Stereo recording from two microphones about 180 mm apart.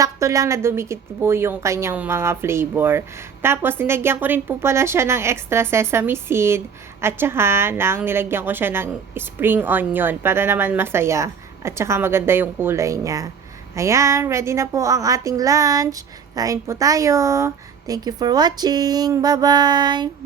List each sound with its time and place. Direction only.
0.0 s a woman's voice: 15° right (ahead or behind)